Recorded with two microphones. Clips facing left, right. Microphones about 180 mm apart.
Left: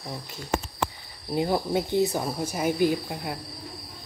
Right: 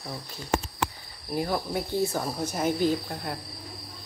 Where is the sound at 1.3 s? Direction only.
20° left (ahead or behind).